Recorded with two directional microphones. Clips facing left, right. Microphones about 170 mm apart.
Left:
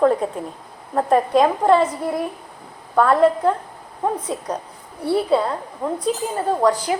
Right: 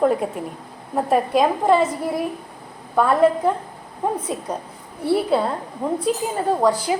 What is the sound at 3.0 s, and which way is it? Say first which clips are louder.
Speech: left 1 dB; 5° right (ahead or behind).